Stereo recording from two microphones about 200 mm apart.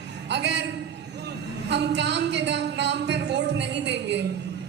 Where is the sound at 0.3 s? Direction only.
60° right (ahead or behind).